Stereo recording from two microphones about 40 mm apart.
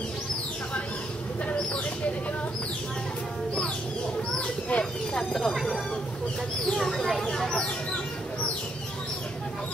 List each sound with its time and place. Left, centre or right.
4.4 s a sound: left
5.1 s speech: centre
6.8 s speech: centre